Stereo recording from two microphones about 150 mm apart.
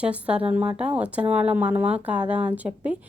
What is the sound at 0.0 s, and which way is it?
Speech, 10° right (ahead or behind).